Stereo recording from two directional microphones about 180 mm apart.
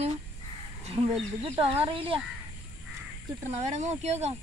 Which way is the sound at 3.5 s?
40° right (ahead or behind).